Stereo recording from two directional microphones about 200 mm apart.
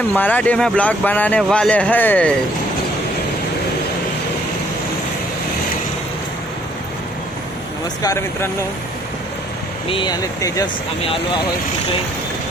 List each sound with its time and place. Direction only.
0.1 s speech: 10° left (ahead or behind)
8.0 s speech: 15° left (ahead or behind)
9.9 s speech: 20° left (ahead or behind)